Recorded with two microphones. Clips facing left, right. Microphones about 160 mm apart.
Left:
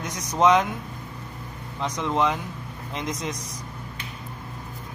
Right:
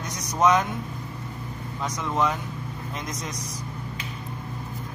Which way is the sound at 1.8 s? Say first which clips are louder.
Left 2 dB; 25° left (ahead or behind).